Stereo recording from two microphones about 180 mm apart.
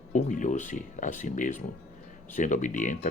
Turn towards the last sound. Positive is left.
turn(degrees=45)  # may be behind; listen again after turning